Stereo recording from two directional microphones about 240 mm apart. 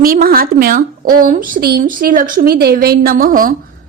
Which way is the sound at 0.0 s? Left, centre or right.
Right.